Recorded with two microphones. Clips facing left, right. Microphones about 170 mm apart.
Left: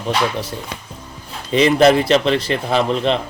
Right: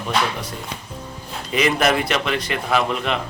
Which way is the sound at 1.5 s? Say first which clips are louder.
Left 7 dB; 30° left (ahead or behind).